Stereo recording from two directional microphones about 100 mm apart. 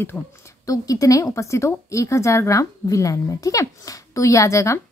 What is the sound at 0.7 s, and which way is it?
Speech, 35° left (ahead or behind).